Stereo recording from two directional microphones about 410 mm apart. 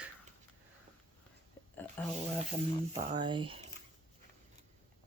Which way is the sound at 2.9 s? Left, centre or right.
Centre.